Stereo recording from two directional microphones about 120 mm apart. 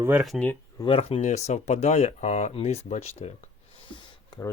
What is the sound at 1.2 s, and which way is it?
Speech, 75° left (ahead or behind).